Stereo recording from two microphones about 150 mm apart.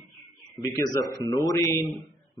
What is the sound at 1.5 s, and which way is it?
Speech, 25° left (ahead or behind).